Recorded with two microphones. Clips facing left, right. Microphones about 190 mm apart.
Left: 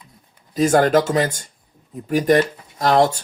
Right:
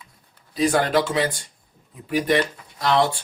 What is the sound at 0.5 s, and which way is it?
Speech, 45° left (ahead or behind).